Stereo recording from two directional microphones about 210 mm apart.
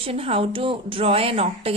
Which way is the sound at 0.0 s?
25° right (ahead or behind).